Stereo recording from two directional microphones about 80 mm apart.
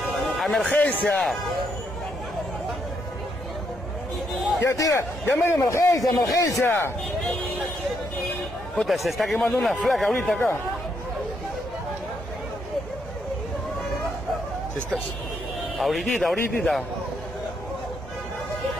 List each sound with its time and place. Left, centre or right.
0.1 s a sound: centre
0.7 s a man's voice: centre
1.1 s speech: centre
4.6 s a man's voice: left
5.2 s a man's voice: left
6.6 s a man's voice: left
8.8 s speech: centre
15.8 s speech: centre